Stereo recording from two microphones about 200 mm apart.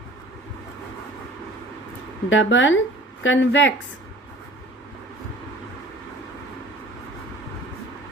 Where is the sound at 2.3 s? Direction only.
70° left (ahead or behind).